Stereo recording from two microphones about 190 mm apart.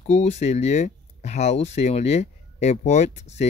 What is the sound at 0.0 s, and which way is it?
Speech, 35° left (ahead or behind).